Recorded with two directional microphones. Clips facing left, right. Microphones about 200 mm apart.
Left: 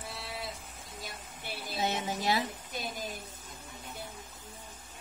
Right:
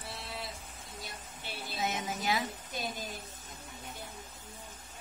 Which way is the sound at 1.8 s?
30° left (ahead or behind).